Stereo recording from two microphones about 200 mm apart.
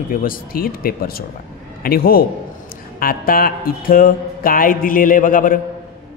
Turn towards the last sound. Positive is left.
turn(degrees=40)  # may be behind; listen again after turning